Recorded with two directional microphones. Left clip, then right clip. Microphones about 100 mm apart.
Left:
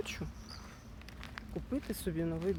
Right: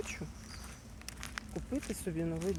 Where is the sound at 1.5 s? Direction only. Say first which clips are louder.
Left 2 dB; 30° left (ahead or behind).